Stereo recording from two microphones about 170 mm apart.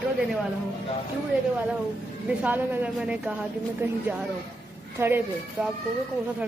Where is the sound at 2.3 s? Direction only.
10° right (ahead or behind).